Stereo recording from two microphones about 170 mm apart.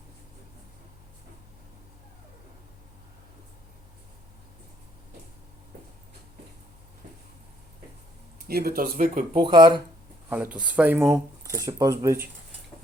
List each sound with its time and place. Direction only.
8.4 s speech: 65° right (ahead or behind)
9.3 s speech: 30° right (ahead or behind)
10.2 s speech: 10° right (ahead or behind)